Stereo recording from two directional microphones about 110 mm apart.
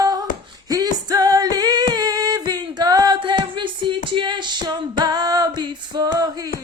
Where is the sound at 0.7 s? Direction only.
35° right (ahead or behind).